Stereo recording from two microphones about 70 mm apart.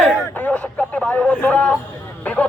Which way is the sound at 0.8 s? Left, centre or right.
Centre.